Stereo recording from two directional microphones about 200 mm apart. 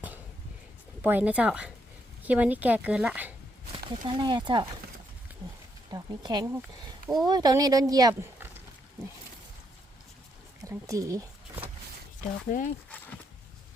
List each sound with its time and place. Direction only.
1.0 s speech: 10° right (ahead or behind)
3.8 s speech: 25° right (ahead or behind)
5.9 s speech: 20° right (ahead or behind)
10.6 s speech: 15° right (ahead or behind)
12.5 s speech: 40° left (ahead or behind)